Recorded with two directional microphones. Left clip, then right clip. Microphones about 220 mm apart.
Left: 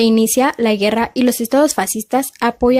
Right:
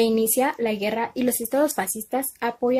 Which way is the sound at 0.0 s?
40° left (ahead or behind).